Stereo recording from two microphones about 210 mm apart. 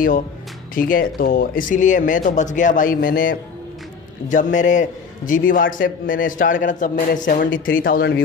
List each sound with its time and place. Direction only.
0.7 s a man's voice: 40° left (ahead or behind)